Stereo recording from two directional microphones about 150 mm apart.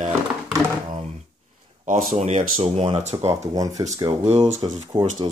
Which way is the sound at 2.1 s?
45° right (ahead or behind).